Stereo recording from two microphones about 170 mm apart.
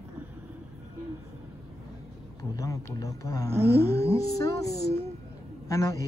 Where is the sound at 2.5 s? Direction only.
20° left (ahead or behind).